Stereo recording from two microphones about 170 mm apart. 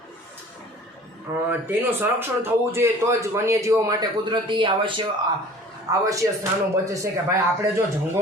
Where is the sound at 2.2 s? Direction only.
15° right (ahead or behind).